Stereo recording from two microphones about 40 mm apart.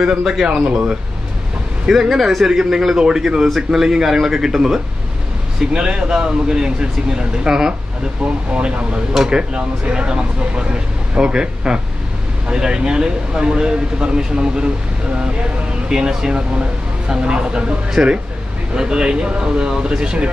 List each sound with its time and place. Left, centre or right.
0.0 s speech: centre
0.5 s speech: right
1.9 s speech: centre; by 9.0 s right
9.1 s speech: centre
9.4 s speech: right